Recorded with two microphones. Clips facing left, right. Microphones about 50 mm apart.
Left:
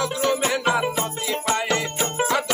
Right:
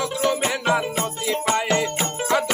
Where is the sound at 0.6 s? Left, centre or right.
Centre.